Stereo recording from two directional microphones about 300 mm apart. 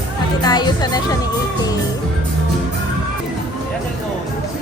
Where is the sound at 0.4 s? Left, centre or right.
Centre.